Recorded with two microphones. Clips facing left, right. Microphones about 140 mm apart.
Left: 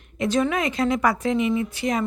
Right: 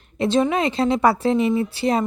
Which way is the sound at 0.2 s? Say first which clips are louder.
Right 3 dB; 25° right (ahead or behind).